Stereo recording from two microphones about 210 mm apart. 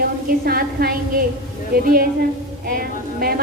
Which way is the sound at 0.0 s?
45° right (ahead or behind).